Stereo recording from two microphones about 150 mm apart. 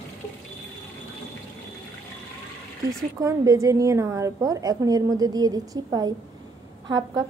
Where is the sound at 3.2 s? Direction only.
25° right (ahead or behind).